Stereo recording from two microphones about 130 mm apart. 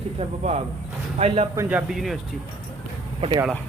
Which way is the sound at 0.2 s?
55° right (ahead or behind).